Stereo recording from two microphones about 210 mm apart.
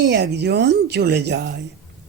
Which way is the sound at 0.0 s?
55° right (ahead or behind).